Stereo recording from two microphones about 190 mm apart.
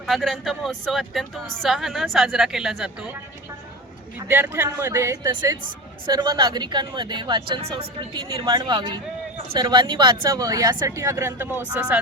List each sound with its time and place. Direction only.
0.0 s speech: centre (ahead or behind)
4.3 s a woman's voice: 10° right (ahead or behind)